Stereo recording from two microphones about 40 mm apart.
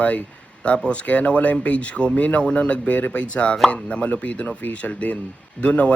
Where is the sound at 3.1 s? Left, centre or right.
Left.